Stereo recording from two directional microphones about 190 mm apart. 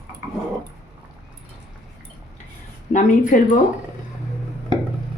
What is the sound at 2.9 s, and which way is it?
Speech, 40° left (ahead or behind).